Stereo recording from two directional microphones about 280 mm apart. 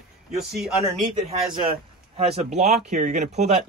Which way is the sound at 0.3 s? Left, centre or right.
Centre.